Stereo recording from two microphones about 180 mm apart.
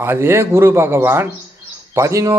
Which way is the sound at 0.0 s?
15° right (ahead or behind).